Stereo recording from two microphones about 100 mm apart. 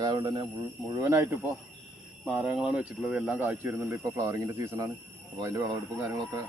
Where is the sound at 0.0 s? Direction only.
45° right (ahead or behind).